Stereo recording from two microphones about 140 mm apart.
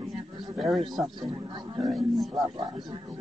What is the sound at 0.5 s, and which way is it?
Speech, centre (ahead or behind).